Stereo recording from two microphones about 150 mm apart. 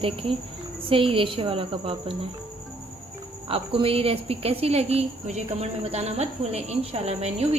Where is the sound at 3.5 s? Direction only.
40° right (ahead or behind).